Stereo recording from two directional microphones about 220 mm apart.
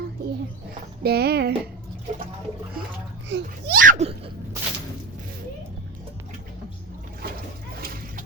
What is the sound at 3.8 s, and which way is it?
Speech, 35° right (ahead or behind).